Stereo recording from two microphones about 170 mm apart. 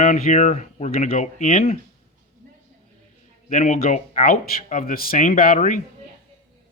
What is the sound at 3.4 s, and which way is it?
Speech, 45° left (ahead or behind).